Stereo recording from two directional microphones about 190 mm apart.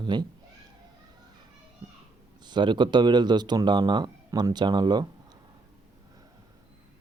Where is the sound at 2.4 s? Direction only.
25° right (ahead or behind).